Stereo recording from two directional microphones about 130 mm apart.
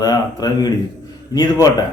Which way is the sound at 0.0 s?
30° left (ahead or behind).